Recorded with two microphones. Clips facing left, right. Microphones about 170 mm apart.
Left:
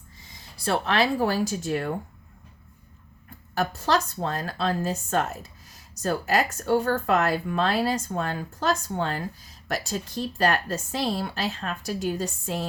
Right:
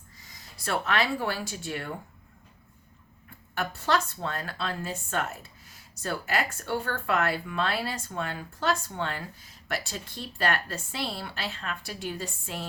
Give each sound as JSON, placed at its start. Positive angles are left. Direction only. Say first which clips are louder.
{"t": 0.2, "sound": "speech", "louder": "left 2 dB", "side_deg": 25}
{"t": 3.5, "sound": "speech", "louder": "left 3 dB", "side_deg": 40}